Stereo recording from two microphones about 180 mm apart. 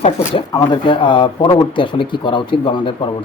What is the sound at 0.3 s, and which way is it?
Speech, 25° left (ahead or behind).